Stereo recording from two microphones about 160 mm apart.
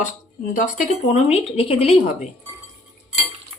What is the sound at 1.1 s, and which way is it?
Speech, 40° left (ahead or behind).